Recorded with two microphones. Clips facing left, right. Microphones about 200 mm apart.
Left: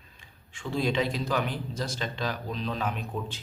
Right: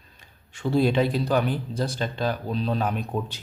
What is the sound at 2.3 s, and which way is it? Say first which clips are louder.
Speech: right 6 dB; 35° right (ahead or behind).